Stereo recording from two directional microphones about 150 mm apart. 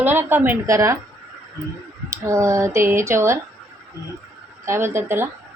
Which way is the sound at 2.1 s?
20° right (ahead or behind).